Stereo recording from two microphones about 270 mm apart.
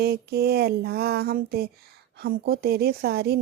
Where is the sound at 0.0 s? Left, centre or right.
Right.